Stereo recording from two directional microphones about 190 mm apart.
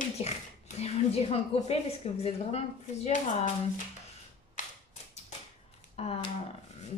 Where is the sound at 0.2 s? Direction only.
30° left (ahead or behind).